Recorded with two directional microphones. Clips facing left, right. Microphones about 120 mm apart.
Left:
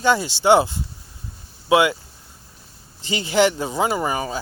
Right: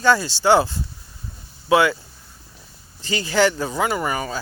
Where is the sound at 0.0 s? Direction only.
20° left (ahead or behind).